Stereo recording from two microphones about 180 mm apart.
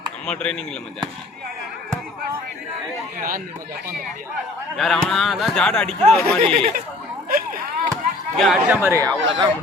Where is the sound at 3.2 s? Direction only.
50° right (ahead or behind).